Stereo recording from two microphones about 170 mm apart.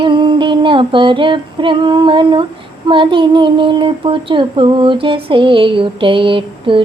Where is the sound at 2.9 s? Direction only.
30° right (ahead or behind).